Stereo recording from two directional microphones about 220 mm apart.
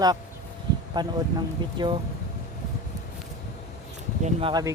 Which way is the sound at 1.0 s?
20° right (ahead or behind).